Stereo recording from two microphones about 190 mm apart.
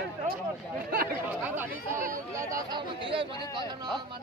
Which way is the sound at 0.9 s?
50° right (ahead or behind).